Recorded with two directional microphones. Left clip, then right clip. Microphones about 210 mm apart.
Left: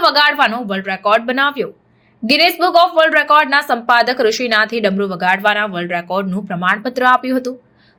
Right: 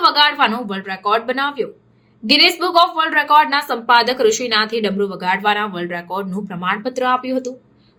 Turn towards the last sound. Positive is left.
turn(degrees=20)  # may be behind; listen again after turning